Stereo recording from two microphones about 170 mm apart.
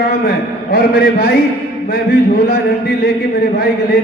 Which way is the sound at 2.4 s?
65° left (ahead or behind).